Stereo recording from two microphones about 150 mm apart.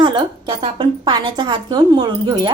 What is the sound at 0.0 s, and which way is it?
A woman's voice, 30° right (ahead or behind).